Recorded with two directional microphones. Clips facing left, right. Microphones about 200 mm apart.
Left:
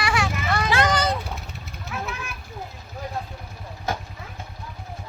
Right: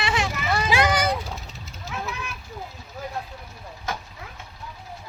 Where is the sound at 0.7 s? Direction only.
10° right (ahead or behind).